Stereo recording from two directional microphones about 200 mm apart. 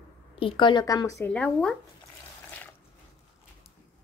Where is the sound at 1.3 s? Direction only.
5° left (ahead or behind).